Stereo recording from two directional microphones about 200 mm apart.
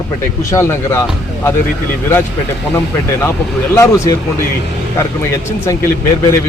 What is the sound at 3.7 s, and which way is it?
Speech, 15° left (ahead or behind).